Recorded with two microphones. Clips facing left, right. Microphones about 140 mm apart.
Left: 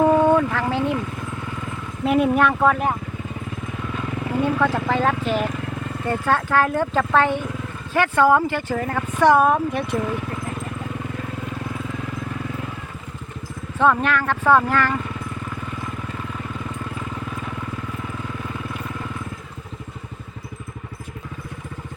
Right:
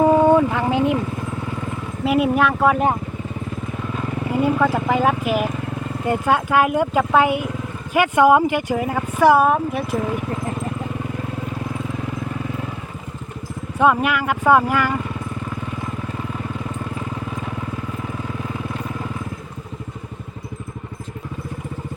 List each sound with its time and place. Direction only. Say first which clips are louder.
0.0 s vehicle: right 2 dB; 15° right (ahead or behind)
2.0 s speech: even; 5° right (ahead or behind)
2.7 s speech: right 4 dB; 25° right (ahead or behind)
4.3 s speech: right 2 dB; 10° right (ahead or behind)
13.7 s speech: right 1 dB; 10° right (ahead or behind)